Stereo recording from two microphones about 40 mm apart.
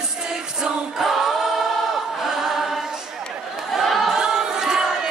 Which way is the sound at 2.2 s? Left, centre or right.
Centre.